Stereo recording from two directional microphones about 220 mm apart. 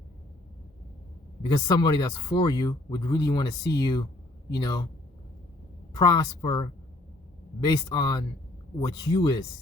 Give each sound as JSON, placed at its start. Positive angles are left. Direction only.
{"t": 1.5, "sound": "speech", "side_deg": 20}
{"t": 5.9, "sound": "speech", "side_deg": 20}